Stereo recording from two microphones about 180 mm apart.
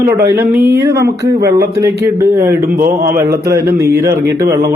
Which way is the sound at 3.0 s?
15° right (ahead or behind).